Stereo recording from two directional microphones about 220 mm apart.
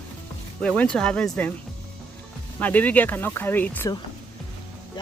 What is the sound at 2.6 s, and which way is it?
Speech, 10° left (ahead or behind).